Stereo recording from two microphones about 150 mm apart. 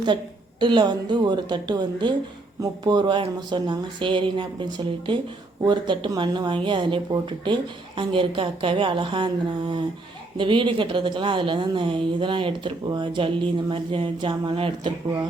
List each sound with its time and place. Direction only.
0.6 s a woman's voice: 30° right (ahead or behind)